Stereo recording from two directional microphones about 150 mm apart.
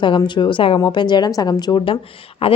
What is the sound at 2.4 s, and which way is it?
Speech, 40° left (ahead or behind).